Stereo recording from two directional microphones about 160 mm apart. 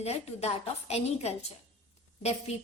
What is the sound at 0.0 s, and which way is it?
A woman's voice, 40° left (ahead or behind).